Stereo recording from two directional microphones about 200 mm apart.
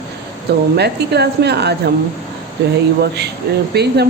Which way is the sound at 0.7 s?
55° right (ahead or behind).